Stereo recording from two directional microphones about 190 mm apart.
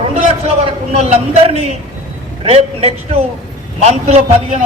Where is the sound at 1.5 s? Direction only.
30° right (ahead or behind).